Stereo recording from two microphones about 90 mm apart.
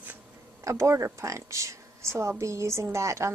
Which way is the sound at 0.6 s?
35° right (ahead or behind).